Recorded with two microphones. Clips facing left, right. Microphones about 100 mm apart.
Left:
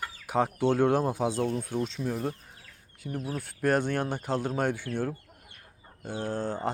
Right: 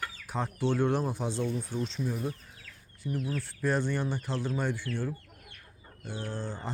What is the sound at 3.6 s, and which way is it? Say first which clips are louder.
Speech: left 4 dB; 55° left (ahead or behind).